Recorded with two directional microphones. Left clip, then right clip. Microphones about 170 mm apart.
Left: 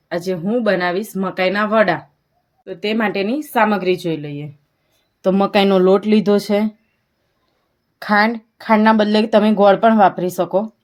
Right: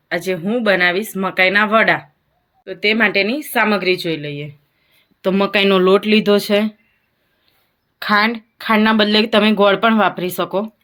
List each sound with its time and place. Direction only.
0.3 s speech: 40° left (ahead or behind)
2.6 s speech: 45° left (ahead or behind)
8.0 s speech: 40° left (ahead or behind)